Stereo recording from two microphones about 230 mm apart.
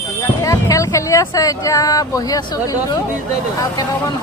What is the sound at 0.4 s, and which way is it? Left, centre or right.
A woman's voice, centre.